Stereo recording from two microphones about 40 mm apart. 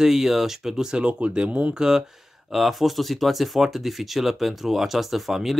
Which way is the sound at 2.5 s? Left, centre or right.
Centre.